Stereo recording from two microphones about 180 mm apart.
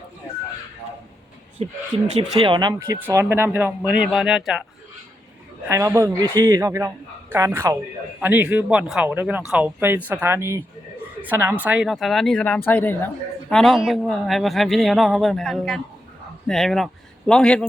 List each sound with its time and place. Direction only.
1.6 s speech: 35° right (ahead or behind); by 4.6 s centre (ahead or behind)
5.6 s a man's voice: 15° right (ahead or behind); by 17.7 s 5° left (ahead or behind)